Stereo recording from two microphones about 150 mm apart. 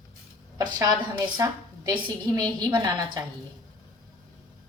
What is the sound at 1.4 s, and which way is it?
A woman's voice, 20° right (ahead or behind).